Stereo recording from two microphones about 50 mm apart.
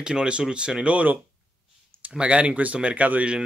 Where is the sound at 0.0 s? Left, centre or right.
Centre.